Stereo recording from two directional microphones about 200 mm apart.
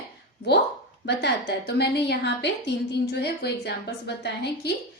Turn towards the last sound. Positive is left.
turn(degrees=55)  # may be behind; listen again after turning